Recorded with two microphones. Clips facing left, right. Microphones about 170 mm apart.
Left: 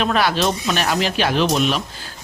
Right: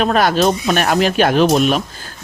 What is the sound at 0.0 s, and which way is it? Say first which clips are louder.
Speech: right 5 dB; 45° right (ahead or behind).